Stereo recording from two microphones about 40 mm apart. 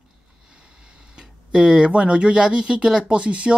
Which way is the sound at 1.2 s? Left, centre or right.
Right.